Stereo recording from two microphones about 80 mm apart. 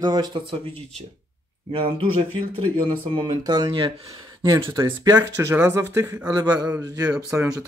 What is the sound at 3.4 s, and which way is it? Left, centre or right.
Speech, right.